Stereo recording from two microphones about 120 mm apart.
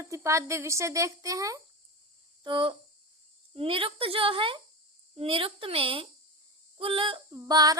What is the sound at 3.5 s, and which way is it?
A woman's voice, 50° right (ahead or behind).